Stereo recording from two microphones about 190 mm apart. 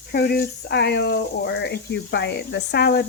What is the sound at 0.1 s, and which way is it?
Speech, 55° left (ahead or behind).